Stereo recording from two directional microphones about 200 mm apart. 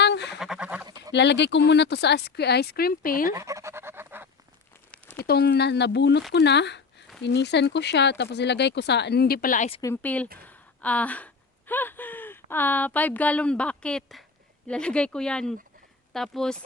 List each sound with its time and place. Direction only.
0.0 s duck: 60° left (ahead or behind)
0.3 s duck: centre (ahead or behind)
1.1 s speech: 60° left (ahead or behind)
3.3 s duck: 15° right (ahead or behind)
4.9 s crumpling: 5° left (ahead or behind)
5.2 s speech: 50° left (ahead or behind)
9.8 s speech: 10° left (ahead or behind)